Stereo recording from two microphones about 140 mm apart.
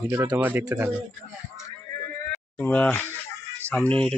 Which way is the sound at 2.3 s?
15° left (ahead or behind).